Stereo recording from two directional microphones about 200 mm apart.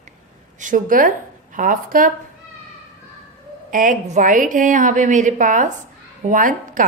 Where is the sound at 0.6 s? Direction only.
40° right (ahead or behind).